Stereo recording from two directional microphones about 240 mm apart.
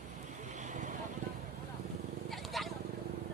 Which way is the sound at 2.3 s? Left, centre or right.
Centre.